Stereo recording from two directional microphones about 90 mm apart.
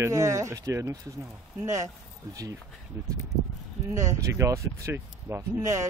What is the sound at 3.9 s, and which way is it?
Speech, 35° right (ahead or behind).